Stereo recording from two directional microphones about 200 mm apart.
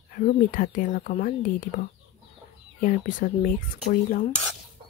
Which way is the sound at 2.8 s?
40° left (ahead or behind).